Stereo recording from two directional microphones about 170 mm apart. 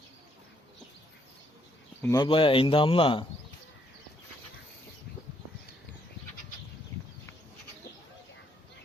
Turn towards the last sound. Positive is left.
turn(degrees=15)  # may be behind; listen again after turning